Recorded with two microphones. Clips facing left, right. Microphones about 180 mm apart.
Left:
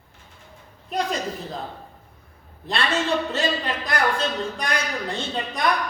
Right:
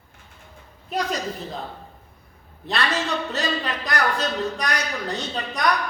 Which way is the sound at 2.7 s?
25° left (ahead or behind).